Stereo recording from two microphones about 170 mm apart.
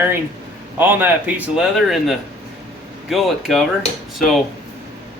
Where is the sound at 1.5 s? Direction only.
Centre (ahead or behind).